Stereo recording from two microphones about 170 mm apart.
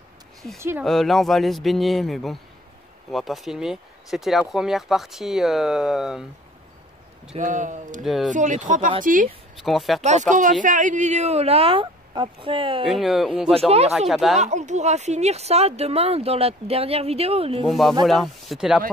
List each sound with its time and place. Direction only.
0.6 s speech: 15° right (ahead or behind)
0.8 s speech: centre (ahead or behind)
7.3 s speech: 50° right (ahead or behind)
8.0 s speech: centre (ahead or behind)
8.3 s speech: 45° right (ahead or behind)
9.6 s speech: centre (ahead or behind)
10.3 s speech: 50° right (ahead or behind); by 12.8 s 30° right (ahead or behind)
12.8 s speech: centre (ahead or behind)
13.5 s speech: 35° right (ahead or behind)
13.9 s speech: centre (ahead or behind)
14.4 s speech: 45° right (ahead or behind)
17.6 s speech: centre (ahead or behind)